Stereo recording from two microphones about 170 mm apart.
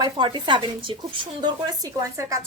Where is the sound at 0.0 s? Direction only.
25° right (ahead or behind).